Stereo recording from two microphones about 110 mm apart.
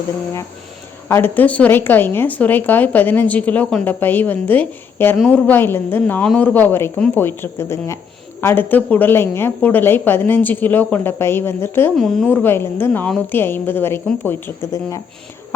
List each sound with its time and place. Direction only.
1.0 s a woman's voice: 20° left (ahead or behind)
5.1 s a woman's voice: 5° left (ahead or behind)
5.5 s a woman's voice: 20° left (ahead or behind)
11.9 s a woman's voice: 5° left (ahead or behind)
12.3 s a woman's voice: 20° left (ahead or behind)